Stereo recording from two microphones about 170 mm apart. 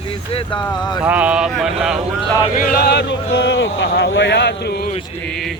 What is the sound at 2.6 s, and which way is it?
A man's voice, 65° left (ahead or behind).